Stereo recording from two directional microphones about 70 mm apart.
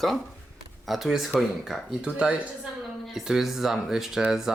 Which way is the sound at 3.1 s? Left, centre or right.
Centre.